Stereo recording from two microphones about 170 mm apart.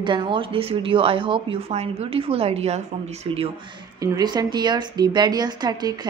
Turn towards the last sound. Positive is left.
turn(degrees=-25)  # may be behind; listen again after turning